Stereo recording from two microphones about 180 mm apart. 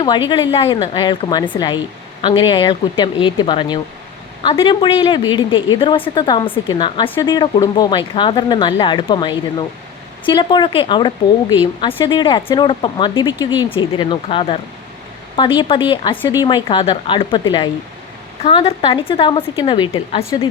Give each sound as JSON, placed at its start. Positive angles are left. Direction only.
{"t": 0.3, "sound": "speech", "side_deg": 30}